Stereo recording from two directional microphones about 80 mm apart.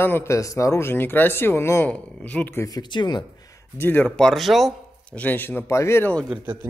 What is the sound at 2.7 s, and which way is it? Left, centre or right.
Speech, left.